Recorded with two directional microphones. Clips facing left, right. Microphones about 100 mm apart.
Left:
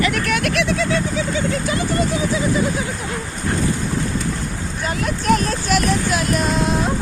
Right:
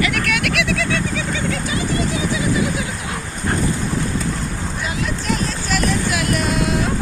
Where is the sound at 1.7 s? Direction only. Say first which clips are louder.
Left 1 dB; 50° left (ahead or behind).